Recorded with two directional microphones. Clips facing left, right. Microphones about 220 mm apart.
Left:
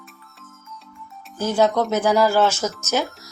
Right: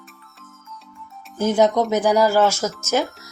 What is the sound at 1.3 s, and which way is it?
A woman's voice, 20° right (ahead or behind).